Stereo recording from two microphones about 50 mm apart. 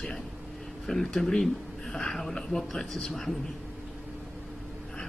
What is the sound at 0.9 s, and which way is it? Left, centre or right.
Speech, centre.